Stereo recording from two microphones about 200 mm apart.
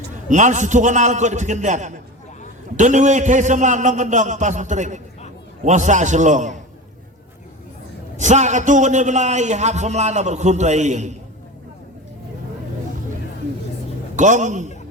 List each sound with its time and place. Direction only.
0.3 s a man's voice: 40° right (ahead or behind)
8.1 s a man's voice: 35° right (ahead or behind)
14.2 s a man's voice: 35° right (ahead or behind)